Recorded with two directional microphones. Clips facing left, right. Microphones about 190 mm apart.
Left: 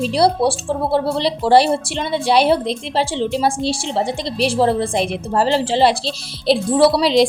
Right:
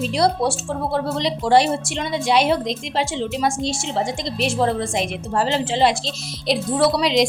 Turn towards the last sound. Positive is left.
turn(degrees=30)  # may be behind; listen again after turning